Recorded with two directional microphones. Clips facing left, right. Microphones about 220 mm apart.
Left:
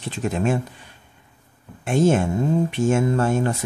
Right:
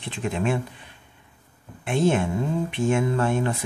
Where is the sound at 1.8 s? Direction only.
45° left (ahead or behind).